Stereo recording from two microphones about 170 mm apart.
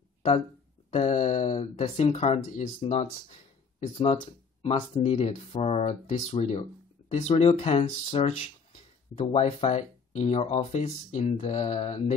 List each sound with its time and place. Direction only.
0.8 s speech: 35° left (ahead or behind)